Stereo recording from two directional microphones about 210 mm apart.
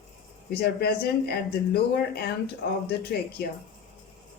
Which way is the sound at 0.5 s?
50° left (ahead or behind).